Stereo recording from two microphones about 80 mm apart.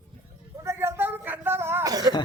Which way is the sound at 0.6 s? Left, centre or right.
Right.